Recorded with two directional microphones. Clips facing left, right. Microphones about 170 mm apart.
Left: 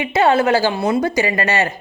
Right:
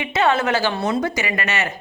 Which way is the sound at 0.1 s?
30° left (ahead or behind).